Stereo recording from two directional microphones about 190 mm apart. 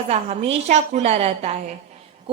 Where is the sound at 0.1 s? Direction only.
35° right (ahead or behind).